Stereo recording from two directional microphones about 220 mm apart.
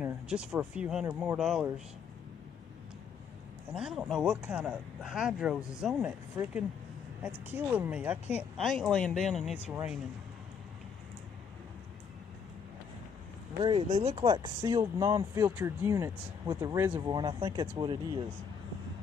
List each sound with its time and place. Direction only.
0.0 s speech: 5° right (ahead or behind)
3.7 s speech: 5° right (ahead or behind)
13.6 s speech: 25° right (ahead or behind)